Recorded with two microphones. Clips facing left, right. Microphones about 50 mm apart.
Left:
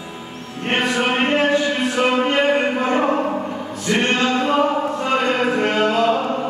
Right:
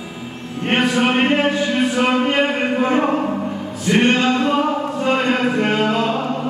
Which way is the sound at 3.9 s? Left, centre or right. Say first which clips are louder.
Right 3 dB; centre.